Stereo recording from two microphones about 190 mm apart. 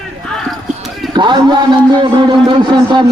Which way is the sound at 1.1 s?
25° right (ahead or behind).